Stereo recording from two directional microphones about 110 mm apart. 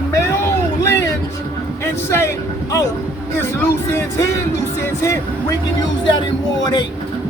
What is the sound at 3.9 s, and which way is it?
Speech, 25° left (ahead or behind).